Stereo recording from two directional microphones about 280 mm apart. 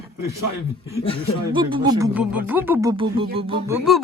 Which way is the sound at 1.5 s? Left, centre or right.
Centre.